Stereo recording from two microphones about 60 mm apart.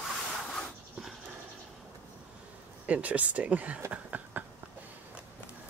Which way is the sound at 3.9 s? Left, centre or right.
Right.